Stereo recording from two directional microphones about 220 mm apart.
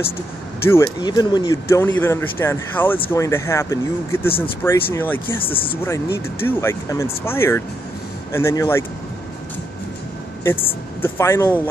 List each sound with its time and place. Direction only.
0.7 s speech: 15° left (ahead or behind)
5.4 s speech: 25° left (ahead or behind)
6.4 s speech: 10° left (ahead or behind)
10.4 s speech: 10° left (ahead or behind)